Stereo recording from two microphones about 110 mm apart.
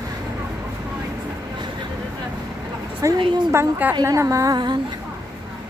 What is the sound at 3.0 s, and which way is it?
Speech, 30° right (ahead or behind).